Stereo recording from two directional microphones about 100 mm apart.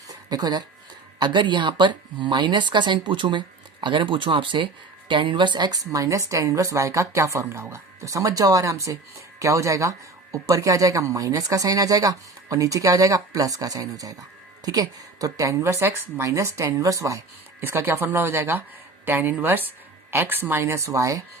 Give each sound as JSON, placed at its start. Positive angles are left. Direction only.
{"t": 0.3, "sound": "a woman's voice", "side_deg": -45}